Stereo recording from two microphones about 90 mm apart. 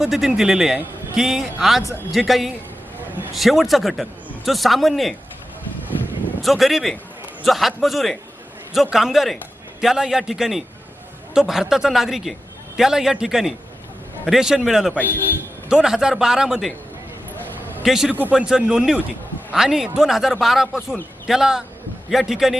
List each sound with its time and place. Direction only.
0.0 s a man's voice: 5° right (ahead or behind)
6.4 s a man's voice: centre (ahead or behind)
17.8 s a man's voice: 5° right (ahead or behind)
18.1 s a man's voice: 20° right (ahead or behind)